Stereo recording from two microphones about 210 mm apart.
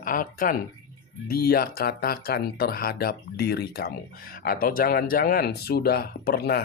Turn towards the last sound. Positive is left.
turn(degrees=50)  # may be behind; listen again after turning